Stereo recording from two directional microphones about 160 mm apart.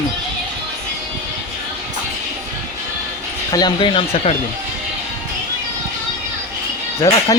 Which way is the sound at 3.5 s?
30° left (ahead or behind).